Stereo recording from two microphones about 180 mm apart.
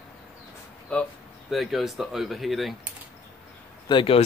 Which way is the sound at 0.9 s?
5° left (ahead or behind).